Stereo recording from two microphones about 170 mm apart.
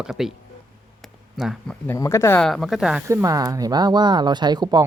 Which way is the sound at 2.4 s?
Centre (ahead or behind).